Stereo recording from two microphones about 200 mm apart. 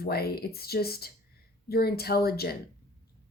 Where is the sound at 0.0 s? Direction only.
50° left (ahead or behind).